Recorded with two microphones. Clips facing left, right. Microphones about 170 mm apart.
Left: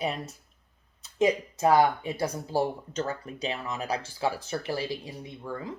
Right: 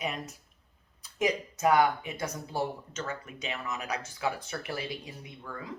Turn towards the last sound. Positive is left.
turn(degrees=30)  # may be behind; listen again after turning